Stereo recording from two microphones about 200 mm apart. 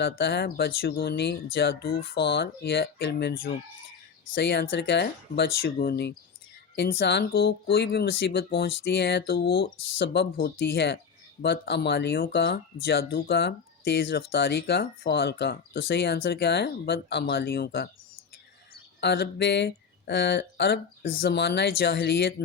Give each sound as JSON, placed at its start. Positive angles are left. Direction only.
{"t": 0.0, "sound": "speech", "side_deg": 55}
{"t": 18.9, "sound": "speech", "side_deg": 55}